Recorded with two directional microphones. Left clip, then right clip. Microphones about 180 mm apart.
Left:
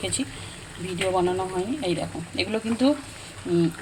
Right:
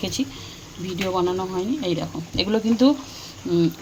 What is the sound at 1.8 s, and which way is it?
A woman's voice, 15° right (ahead or behind).